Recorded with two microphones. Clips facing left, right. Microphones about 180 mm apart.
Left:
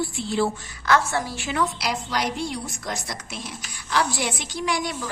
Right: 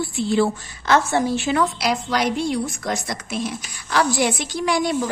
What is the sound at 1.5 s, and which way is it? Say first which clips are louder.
Speech: right 5 dB; 50° right (ahead or behind).